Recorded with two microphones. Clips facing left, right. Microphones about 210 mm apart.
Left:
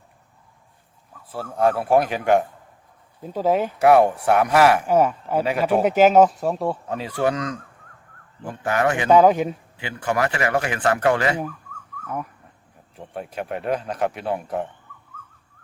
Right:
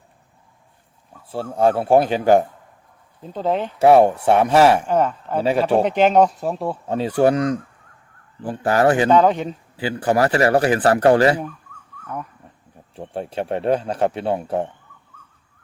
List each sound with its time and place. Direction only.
1.3 s speech: 25° right (ahead or behind)
3.2 s a man's voice: 10° left (ahead or behind)
3.8 s speech: 30° right (ahead or behind)
4.9 s a man's voice: 10° left (ahead or behind)
5.4 s speech: 30° right (ahead or behind)
5.8 s speech: 5° left (ahead or behind)
6.8 s speech: 30° right (ahead or behind)
9.0 s a man's voice: 10° left (ahead or behind)
9.7 s speech: 35° right (ahead or behind)
13.0 s speech: 30° right (ahead or behind)